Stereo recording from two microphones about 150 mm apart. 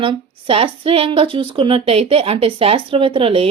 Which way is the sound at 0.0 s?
35° right (ahead or behind).